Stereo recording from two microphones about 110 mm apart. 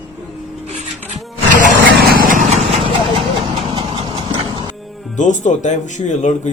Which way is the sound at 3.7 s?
55° right (ahead or behind).